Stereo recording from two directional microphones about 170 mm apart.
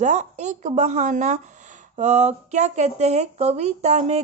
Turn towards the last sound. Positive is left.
turn(degrees=-40)  # may be behind; listen again after turning